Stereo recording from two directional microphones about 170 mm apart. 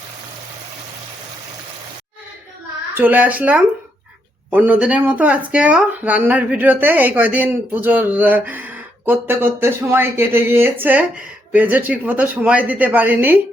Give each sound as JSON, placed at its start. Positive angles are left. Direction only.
{"t": 2.9, "sound": "speech", "side_deg": -10}